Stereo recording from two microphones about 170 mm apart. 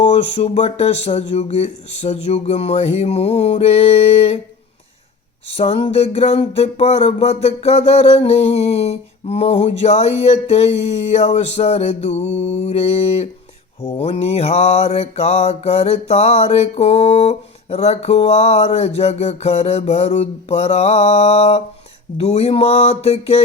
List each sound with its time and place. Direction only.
0.0 s mantra: 40° left (ahead or behind)
5.5 s mantra: 35° left (ahead or behind)